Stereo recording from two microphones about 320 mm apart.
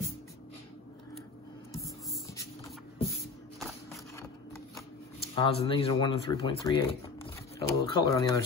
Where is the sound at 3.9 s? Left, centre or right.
Centre.